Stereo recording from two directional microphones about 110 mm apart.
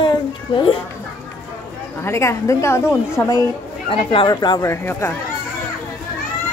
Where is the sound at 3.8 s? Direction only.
55° left (ahead or behind).